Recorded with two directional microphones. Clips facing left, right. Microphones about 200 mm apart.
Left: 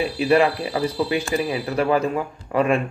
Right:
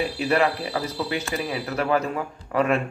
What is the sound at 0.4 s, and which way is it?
Speech, 15° left (ahead or behind).